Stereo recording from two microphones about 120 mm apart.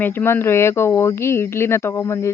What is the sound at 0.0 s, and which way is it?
Speech, 15° left (ahead or behind).